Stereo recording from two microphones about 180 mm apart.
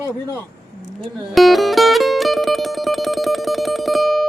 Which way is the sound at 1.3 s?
Centre (ahead or behind).